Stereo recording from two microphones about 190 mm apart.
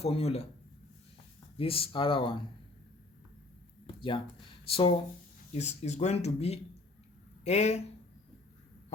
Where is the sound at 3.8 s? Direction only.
25° left (ahead or behind).